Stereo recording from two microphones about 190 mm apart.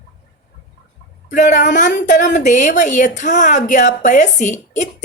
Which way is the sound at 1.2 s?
40° left (ahead or behind).